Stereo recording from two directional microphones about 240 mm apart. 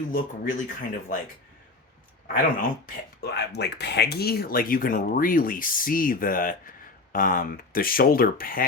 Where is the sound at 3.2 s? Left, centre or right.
Left.